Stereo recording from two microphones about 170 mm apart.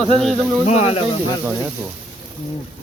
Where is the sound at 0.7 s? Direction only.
40° left (ahead or behind).